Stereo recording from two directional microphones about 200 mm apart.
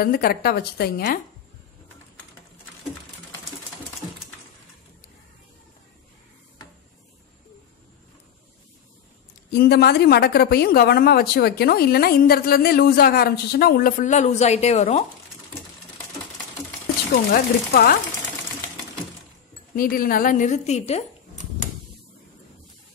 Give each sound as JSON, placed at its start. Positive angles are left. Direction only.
{"t": 0.0, "sound": "speech", "side_deg": 50}
{"t": 9.5, "sound": "speech", "side_deg": 50}
{"t": 17.3, "sound": "speech", "side_deg": 50}
{"t": 19.7, "sound": "a woman's voice", "side_deg": 45}